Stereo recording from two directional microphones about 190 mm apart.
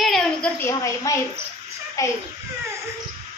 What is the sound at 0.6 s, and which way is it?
A woman's voice, 15° left (ahead or behind).